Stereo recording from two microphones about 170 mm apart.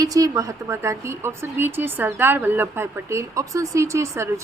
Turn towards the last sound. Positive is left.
turn(degrees=-15)  # may be behind; listen again after turning